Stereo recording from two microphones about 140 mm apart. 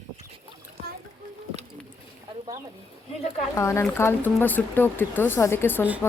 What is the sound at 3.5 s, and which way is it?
A woman's voice, 20° left (ahead or behind).